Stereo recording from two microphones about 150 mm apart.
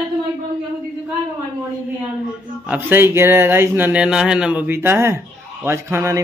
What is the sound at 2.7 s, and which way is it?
A man's voice, 15° right (ahead or behind).